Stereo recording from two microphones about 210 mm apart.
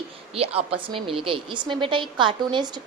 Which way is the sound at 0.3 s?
25° right (ahead or behind).